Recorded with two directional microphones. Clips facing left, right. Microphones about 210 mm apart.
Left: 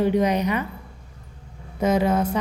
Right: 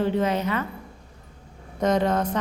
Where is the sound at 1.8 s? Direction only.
10° left (ahead or behind).